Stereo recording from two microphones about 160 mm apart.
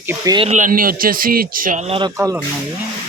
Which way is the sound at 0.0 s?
15° right (ahead or behind).